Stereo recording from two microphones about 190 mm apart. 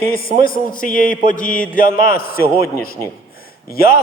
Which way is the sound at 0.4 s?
45° left (ahead or behind).